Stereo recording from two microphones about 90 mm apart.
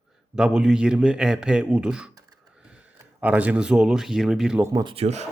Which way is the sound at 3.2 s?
15° right (ahead or behind).